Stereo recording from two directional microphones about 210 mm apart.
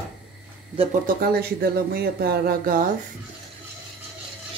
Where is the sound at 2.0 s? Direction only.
45° right (ahead or behind).